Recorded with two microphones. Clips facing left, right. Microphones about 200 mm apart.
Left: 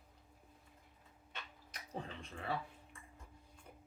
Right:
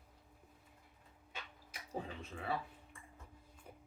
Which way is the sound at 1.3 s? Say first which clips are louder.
Right 1 dB; 10° right (ahead or behind).